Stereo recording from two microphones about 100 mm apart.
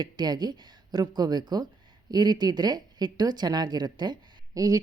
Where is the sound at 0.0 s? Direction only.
45° right (ahead or behind).